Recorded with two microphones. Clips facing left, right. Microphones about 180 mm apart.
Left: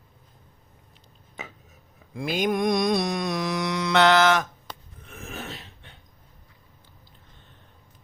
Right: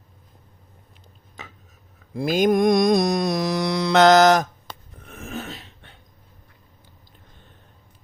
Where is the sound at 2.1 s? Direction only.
40° right (ahead or behind).